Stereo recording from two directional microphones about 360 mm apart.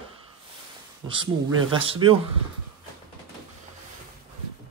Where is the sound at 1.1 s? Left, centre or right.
Centre.